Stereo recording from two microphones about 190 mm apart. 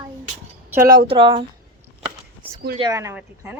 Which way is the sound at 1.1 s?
25° right (ahead or behind).